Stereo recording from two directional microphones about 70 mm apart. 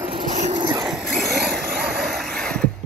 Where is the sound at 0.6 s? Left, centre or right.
Right.